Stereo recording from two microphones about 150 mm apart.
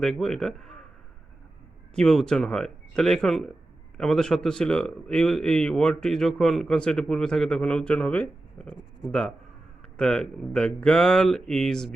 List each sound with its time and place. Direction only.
0.0 s speech: centre (ahead or behind)
2.0 s speech: 5° left (ahead or behind)
10.0 s speech: 5° left (ahead or behind)